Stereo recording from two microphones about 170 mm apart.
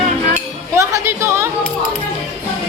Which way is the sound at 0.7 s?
15° right (ahead or behind).